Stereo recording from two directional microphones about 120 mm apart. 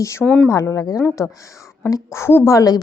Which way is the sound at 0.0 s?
25° left (ahead or behind).